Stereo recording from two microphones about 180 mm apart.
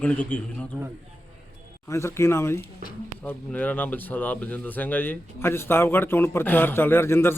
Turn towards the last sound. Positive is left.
turn(degrees=15)  # may be behind; listen again after turning